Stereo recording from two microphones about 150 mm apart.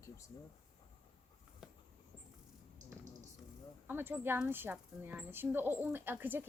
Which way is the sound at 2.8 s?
55° right (ahead or behind).